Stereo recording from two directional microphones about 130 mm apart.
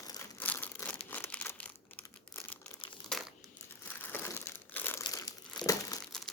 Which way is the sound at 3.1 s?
Centre (ahead or behind).